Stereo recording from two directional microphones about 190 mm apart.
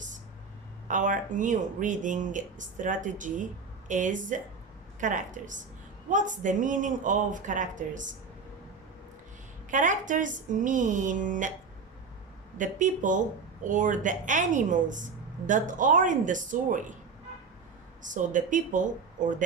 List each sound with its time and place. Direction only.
0.9 s a woman's voice: 40° right (ahead or behind)
9.6 s speech: 40° right (ahead or behind)
12.5 s speech: 45° right (ahead or behind)
18.0 s speech: 40° right (ahead or behind)